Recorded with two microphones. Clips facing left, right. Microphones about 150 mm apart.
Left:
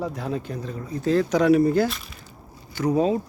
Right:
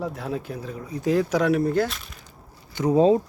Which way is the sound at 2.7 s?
20° right (ahead or behind).